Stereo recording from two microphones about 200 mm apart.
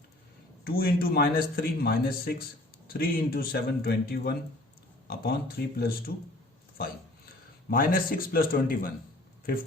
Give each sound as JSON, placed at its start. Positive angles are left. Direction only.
{"t": 0.6, "sound": "a man's voice", "side_deg": 50}
{"t": 7.7, "sound": "a man's voice", "side_deg": 45}